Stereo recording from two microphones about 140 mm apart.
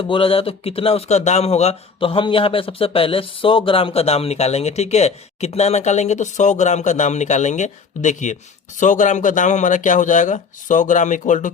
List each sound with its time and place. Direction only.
0.0 s speech: 40° left (ahead or behind); by 11.5 s 65° left (ahead or behind)